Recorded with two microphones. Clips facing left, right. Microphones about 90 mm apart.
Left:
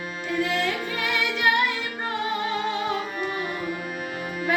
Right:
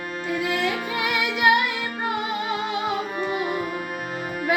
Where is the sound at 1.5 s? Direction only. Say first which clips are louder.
Right 4 dB; 15° right (ahead or behind).